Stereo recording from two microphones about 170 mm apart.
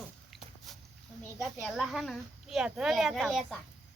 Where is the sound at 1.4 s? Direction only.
Centre (ahead or behind).